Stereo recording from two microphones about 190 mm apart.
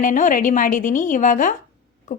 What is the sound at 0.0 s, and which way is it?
A woman's voice, 45° left (ahead or behind).